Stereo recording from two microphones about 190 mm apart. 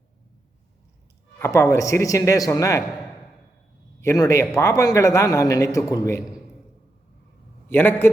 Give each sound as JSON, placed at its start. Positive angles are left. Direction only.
{"t": 1.4, "sound": "a man's voice", "side_deg": 15}
{"t": 4.0, "sound": "a man's voice", "side_deg": 15}
{"t": 7.7, "sound": "a man's voice", "side_deg": 10}